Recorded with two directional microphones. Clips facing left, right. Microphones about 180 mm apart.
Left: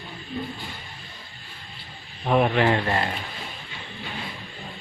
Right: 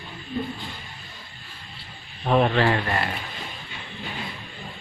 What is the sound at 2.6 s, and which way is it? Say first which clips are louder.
Speech: left 1 dB; 20° left (ahead or behind).